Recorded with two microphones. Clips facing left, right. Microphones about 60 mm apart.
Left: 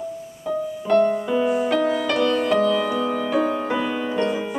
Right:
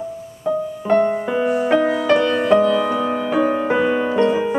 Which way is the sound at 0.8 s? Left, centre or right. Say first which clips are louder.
Right 1 dB; right.